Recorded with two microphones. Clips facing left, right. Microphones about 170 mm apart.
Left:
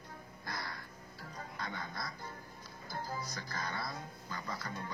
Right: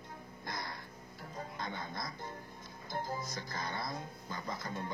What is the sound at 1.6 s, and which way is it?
Speech, 20° right (ahead or behind).